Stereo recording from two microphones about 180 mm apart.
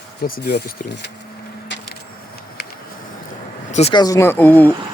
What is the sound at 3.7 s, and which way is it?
Speech, 35° left (ahead or behind).